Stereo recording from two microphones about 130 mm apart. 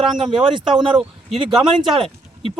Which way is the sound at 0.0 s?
Centre (ahead or behind).